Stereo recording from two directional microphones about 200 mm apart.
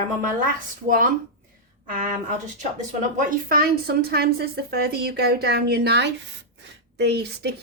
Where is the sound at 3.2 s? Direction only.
45° right (ahead or behind).